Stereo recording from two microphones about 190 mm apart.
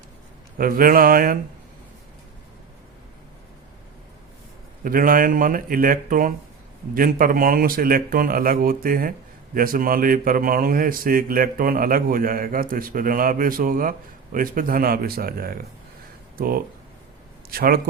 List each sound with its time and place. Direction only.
0.6 s speech: 50° right (ahead or behind)
4.8 s speech: 45° right (ahead or behind)